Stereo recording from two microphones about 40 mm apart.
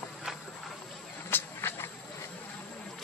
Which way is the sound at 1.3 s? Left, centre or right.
Left.